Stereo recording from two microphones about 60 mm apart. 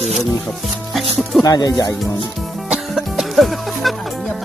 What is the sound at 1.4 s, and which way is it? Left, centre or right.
Speech, left.